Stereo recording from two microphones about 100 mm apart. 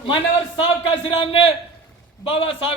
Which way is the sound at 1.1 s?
80° left.